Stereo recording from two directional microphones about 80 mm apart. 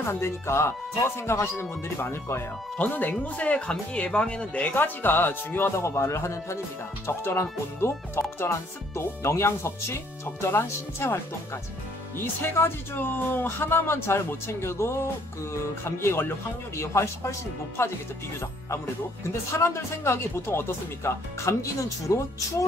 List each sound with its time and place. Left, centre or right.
0.0 s speech: left
2.8 s speech: left
5.8 s speech: left
19.5 s speech: left